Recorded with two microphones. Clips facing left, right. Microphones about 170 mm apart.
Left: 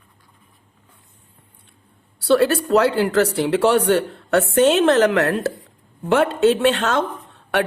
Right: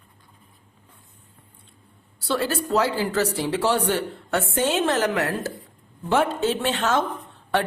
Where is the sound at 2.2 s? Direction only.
70° left (ahead or behind).